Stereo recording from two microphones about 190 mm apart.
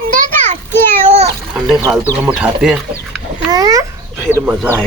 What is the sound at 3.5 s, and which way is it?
Speech, 20° right (ahead or behind).